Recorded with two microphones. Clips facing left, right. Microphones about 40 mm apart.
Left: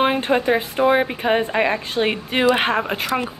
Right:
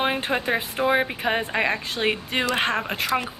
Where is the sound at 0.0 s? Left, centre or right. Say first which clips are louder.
Left 6 dB; centre.